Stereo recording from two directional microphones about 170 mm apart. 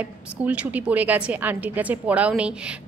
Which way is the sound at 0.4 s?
10° right (ahead or behind).